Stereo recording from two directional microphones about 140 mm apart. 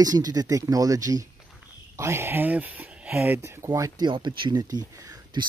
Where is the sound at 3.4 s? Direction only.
20° right (ahead or behind).